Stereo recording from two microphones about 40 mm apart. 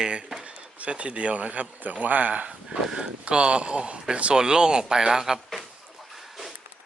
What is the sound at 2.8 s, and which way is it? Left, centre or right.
Speech, centre.